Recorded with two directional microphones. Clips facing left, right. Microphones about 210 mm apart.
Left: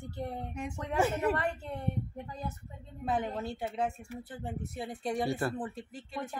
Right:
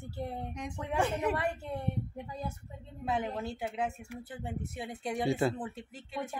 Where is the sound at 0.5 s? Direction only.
5° left (ahead or behind).